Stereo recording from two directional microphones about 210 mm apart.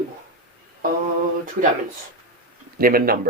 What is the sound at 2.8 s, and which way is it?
Speech, 45° right (ahead or behind).